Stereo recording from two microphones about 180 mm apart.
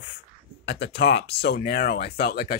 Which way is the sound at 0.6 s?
70° left (ahead or behind).